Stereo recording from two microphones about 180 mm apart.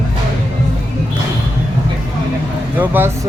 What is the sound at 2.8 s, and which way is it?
Speech, 10° right (ahead or behind).